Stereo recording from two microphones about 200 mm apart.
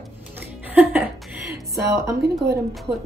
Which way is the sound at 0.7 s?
5° right (ahead or behind).